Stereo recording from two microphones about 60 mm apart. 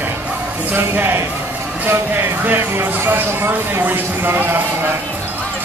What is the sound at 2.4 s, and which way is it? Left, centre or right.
A man's voice, right.